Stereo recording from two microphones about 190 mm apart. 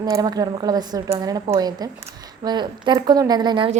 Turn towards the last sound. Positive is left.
turn(degrees=-25)  # may be behind; listen again after turning